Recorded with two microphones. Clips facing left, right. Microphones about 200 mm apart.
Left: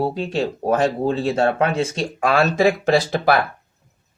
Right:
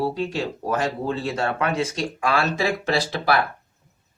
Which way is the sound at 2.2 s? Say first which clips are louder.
Left 6 dB; 50° left (ahead or behind).